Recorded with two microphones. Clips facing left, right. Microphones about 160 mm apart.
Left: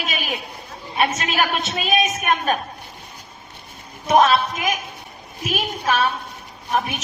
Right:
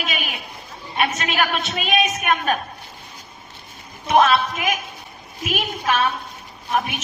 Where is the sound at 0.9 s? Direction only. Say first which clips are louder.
Left 1 dB; 35° left (ahead or behind).